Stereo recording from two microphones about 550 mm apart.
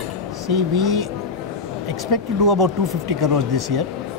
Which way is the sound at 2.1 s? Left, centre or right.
Right.